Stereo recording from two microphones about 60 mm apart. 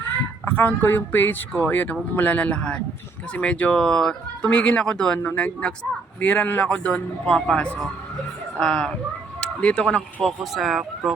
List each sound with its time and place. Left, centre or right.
0.1 s a man's voice: left; by 8.9 s centre
9.4 s chicken: centre
10.2 s speech: centre